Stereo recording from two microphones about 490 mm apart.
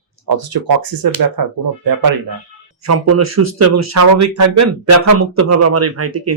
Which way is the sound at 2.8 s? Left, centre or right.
Right.